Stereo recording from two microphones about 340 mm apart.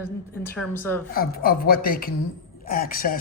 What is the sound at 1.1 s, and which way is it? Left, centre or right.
Speech, left.